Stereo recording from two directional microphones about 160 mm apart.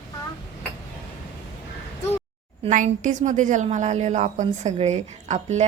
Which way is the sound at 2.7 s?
50° right (ahead or behind).